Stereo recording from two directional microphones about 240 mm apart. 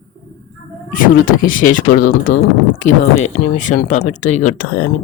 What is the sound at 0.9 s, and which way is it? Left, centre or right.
Speech, left.